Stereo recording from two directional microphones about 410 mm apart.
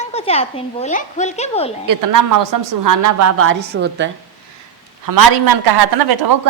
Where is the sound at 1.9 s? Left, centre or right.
Right.